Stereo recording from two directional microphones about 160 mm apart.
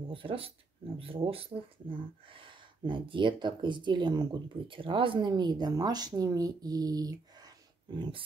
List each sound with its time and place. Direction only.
0.1 s speech: 35° right (ahead or behind)